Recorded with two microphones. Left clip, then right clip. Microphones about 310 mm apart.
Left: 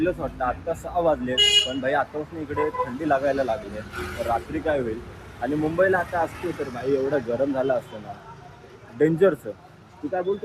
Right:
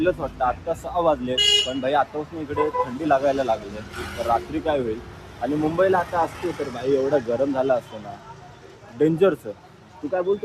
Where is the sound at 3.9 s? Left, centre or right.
Right.